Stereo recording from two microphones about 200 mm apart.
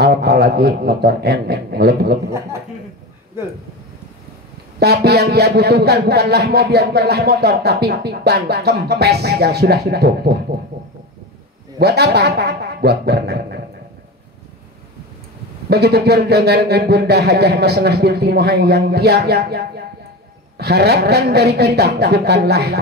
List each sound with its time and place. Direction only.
0.0 s a man's voice: 55° right (ahead or behind)
3.4 s speech: 10° right (ahead or behind)
4.7 s a man's voice: 55° right (ahead or behind)
11.8 s a man's voice: 55° right (ahead or behind)
15.7 s a man's voice: 55° right (ahead or behind)